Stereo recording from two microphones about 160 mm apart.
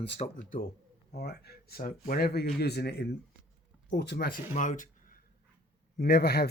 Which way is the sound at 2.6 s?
90° left.